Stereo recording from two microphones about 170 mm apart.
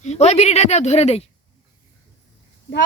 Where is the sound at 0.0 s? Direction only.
40° left (ahead or behind).